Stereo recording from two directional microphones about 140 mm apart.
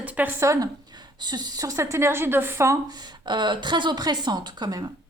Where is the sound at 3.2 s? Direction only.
35° right (ahead or behind).